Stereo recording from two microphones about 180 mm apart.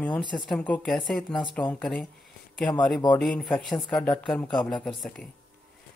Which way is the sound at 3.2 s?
Centre (ahead or behind).